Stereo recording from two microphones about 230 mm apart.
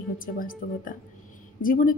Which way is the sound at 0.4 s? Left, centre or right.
Left.